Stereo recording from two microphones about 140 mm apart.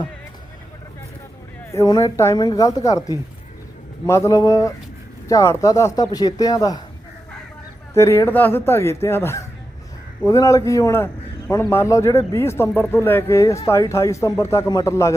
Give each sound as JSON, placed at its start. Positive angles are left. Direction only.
{"t": 1.7, "sound": "a man's voice", "side_deg": 20}
{"t": 7.9, "sound": "a man's voice", "side_deg": 20}